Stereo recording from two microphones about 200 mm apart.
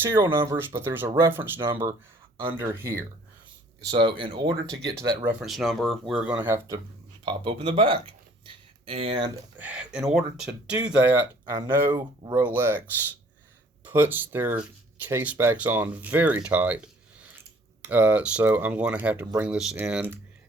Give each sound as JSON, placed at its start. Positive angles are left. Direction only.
{"t": 0.0, "sound": "speech", "side_deg": -10}
{"t": 3.9, "sound": "speech", "side_deg": -25}
{"t": 5.2, "sound": "speech", "side_deg": -5}
{"t": 7.3, "sound": "speech", "side_deg": -25}
{"t": 9.6, "sound": "speech", "side_deg": -5}
{"t": 17.8, "sound": "speech", "side_deg": -5}